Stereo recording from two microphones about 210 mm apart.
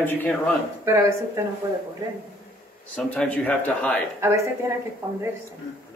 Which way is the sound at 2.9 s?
5° left (ahead or behind).